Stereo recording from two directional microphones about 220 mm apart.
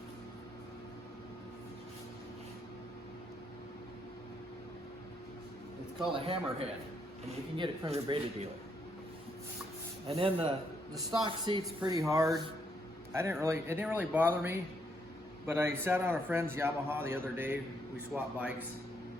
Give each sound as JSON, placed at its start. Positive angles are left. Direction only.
{"t": 6.1, "sound": "speech", "side_deg": -25}
{"t": 10.1, "sound": "a man's voice", "side_deg": -25}
{"t": 13.4, "sound": "a man's voice", "side_deg": -10}